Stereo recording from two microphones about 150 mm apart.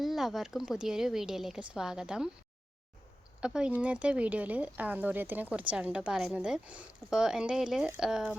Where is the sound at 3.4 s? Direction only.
5° right (ahead or behind).